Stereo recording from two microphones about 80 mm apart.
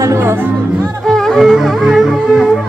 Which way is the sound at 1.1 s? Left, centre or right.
Centre.